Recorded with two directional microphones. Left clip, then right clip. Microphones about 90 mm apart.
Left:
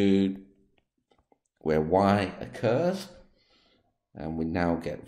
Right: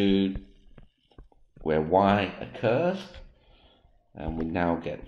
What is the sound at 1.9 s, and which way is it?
Speech, 40° left (ahead or behind).